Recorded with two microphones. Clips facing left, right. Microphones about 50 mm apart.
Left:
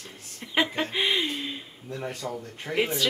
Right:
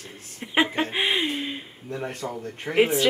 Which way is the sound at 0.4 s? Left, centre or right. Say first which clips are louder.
Right 3 dB; right.